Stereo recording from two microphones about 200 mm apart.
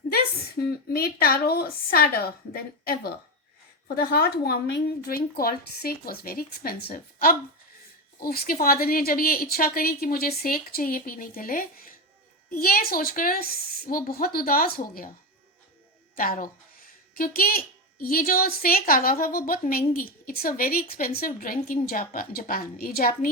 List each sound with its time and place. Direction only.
0.9 s a woman's voice: 50° left (ahead or behind)
16.1 s a woman's voice: 45° left (ahead or behind)